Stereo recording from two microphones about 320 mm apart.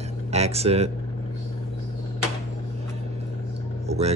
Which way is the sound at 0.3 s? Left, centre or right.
Centre.